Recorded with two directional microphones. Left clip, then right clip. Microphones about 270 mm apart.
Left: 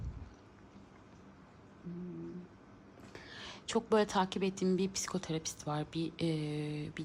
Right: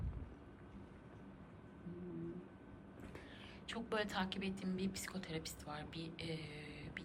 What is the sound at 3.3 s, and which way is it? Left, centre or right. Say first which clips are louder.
A woman's voice: left 13 dB; left.